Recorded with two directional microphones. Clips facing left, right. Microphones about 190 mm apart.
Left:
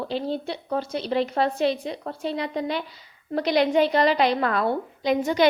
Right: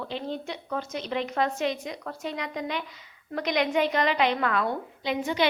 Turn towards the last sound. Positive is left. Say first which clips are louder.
# left 5 dB
turn(degrees=45)  # may be behind; listen again after turning